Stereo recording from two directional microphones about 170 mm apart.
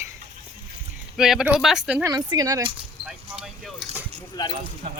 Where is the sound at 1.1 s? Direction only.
5° right (ahead or behind); by 2.7 s 20° right (ahead or behind).